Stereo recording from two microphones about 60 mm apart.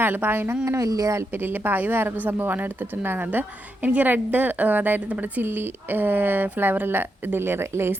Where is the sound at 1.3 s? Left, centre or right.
Right.